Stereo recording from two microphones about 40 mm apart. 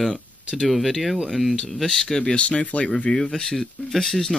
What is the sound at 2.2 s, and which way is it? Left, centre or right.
Speech, left.